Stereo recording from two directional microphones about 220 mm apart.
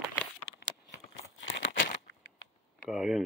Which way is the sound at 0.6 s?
50° left (ahead or behind).